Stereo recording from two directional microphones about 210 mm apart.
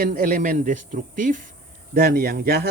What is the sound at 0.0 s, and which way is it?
Speech, 40° right (ahead or behind).